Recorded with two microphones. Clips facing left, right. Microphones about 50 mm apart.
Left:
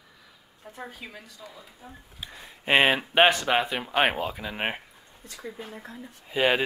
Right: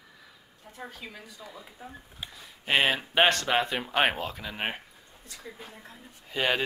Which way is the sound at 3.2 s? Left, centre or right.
Centre.